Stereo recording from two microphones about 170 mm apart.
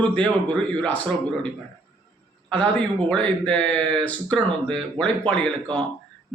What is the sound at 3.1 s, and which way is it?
Speech, 5° left (ahead or behind).